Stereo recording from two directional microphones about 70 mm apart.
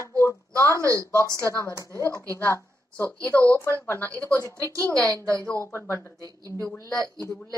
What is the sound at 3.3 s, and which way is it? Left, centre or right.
Speech, left.